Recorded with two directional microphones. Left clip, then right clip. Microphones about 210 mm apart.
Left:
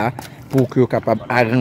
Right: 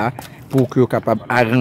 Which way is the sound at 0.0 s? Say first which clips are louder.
Even; 10° right (ahead or behind).